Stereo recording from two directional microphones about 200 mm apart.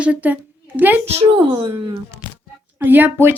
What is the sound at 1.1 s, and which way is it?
Speech, 20° right (ahead or behind).